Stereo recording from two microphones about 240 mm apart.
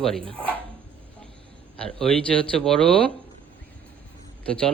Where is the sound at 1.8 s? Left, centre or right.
Centre.